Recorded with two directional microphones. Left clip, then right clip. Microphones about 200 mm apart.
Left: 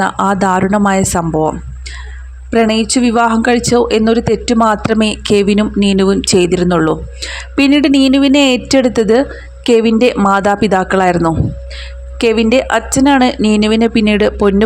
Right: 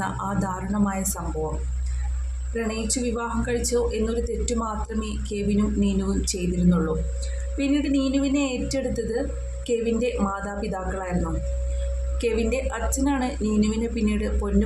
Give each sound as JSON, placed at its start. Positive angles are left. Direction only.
{"t": 0.0, "sound": "speech", "side_deg": 45}
{"t": 2.6, "sound": "speech", "side_deg": 50}
{"t": 12.2, "sound": "speech", "side_deg": 45}